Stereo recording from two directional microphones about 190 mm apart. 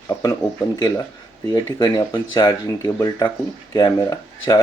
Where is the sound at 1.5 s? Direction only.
15° left (ahead or behind).